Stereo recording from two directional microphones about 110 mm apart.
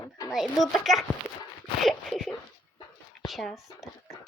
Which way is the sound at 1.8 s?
Centre (ahead or behind).